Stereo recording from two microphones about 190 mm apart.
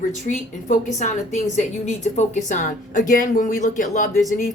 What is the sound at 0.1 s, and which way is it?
A woman's voice, 40° left (ahead or behind).